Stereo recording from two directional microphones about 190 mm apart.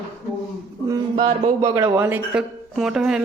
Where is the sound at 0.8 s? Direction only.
20° right (ahead or behind).